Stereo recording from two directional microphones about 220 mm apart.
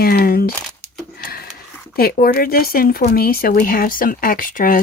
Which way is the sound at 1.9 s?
40° left (ahead or behind).